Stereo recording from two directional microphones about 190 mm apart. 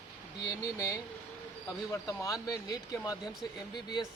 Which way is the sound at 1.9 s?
15° left (ahead or behind).